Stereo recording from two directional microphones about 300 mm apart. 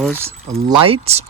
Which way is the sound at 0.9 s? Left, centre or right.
Right.